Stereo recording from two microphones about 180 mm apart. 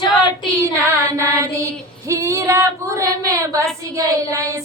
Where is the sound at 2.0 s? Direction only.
15° right (ahead or behind).